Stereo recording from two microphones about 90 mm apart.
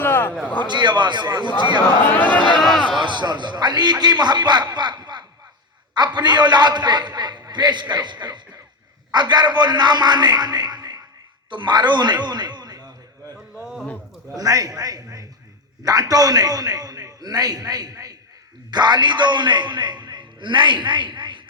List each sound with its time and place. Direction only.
0.0 s a sound: 25° left (ahead or behind)
0.7 s a man's voice: 55° right (ahead or behind)
2.0 s speech: 20° left (ahead or behind)
2.6 s speech: 5° left (ahead or behind)
3.0 s a man's voice: 60° right (ahead or behind)
14.3 s a man's voice: 40° right (ahead or behind)
18.7 s a man's voice: 55° right (ahead or behind)